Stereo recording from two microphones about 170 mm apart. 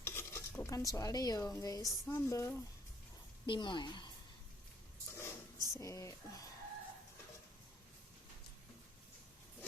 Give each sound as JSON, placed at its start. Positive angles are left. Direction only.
{"t": 0.0, "sound": "stir", "side_deg": 15}
{"t": 3.4, "sound": "a woman's voice", "side_deg": 30}
{"t": 5.0, "sound": "a sound", "side_deg": 15}
{"t": 5.8, "sound": "a woman's voice", "side_deg": 20}